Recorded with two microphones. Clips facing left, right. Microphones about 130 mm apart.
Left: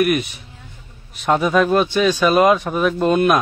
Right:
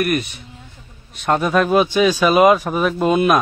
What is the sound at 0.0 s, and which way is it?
Speech, centre (ahead or behind).